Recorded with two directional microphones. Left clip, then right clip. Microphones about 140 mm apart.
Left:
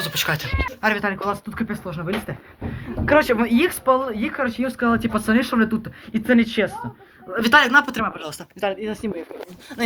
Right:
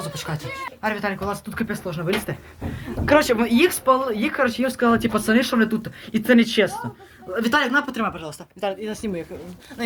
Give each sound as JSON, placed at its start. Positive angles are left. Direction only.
{"t": 0.1, "sound": "speech", "side_deg": 0}
{"t": 1.0, "sound": "speech", "side_deg": -10}
{"t": 1.5, "sound": "speech", "side_deg": -25}
{"t": 1.7, "sound": "speech", "side_deg": -10}
{"t": 2.0, "sound": "speech", "side_deg": -35}
{"t": 3.2, "sound": "speech", "side_deg": -20}
{"t": 4.1, "sound": "speech", "side_deg": -25}
{"t": 6.1, "sound": "speech", "side_deg": -45}
{"t": 7.3, "sound": "speech", "side_deg": 0}
{"t": 7.6, "sound": "speech", "side_deg": 15}
{"t": 8.2, "sound": "speech", "side_deg": 5}